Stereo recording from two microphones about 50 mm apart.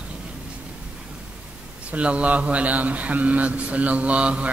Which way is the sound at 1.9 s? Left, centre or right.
Right.